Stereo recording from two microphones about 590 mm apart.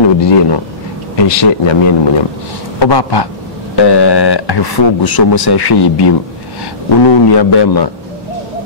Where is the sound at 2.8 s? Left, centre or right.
Left.